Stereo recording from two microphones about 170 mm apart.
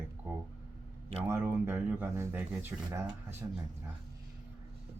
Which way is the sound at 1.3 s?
15° right (ahead or behind).